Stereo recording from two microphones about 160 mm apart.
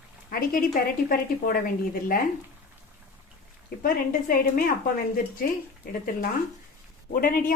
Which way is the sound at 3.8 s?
60° left (ahead or behind).